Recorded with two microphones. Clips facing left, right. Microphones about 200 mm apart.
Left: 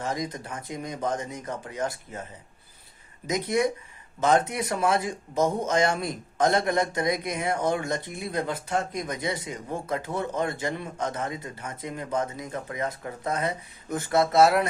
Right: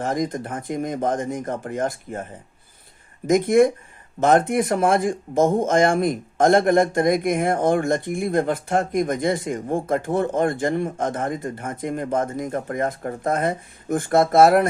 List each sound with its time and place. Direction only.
0.0 s speech: 50° right (ahead or behind)
3.2 s speech: 50° right (ahead or behind)